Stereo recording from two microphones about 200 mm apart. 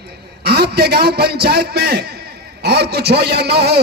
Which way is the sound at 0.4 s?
55° right (ahead or behind).